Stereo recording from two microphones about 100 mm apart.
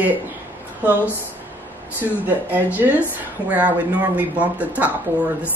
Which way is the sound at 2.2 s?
15° right (ahead or behind).